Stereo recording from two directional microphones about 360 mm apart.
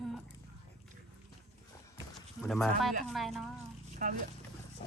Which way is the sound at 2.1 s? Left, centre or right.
Centre.